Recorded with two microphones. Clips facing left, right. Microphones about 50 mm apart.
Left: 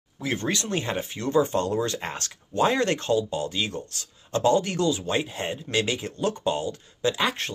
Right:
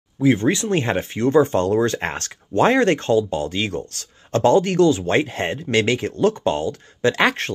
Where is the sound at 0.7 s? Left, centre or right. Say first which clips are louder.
Right 7 dB; right.